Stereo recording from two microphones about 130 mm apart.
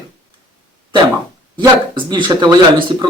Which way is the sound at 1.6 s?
35° right (ahead or behind).